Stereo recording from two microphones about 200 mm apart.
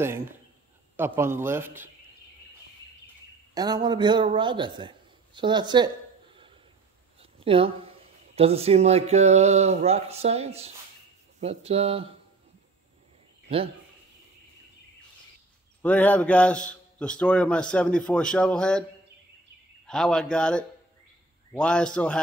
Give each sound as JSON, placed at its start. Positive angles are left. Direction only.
{"t": 0.0, "sound": "a man's voice", "side_deg": -10}
{"t": 3.5, "sound": "a man's voice", "side_deg": -20}
{"t": 7.2, "sound": "a sound", "side_deg": -25}
{"t": 8.4, "sound": "speech", "side_deg": -30}
{"t": 15.8, "sound": "a man's voice", "side_deg": 10}
{"t": 19.9, "sound": "a man's voice", "side_deg": 5}